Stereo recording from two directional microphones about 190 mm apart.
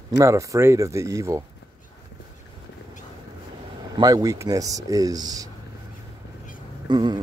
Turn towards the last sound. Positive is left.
turn(degrees=-20)  # may be behind; listen again after turning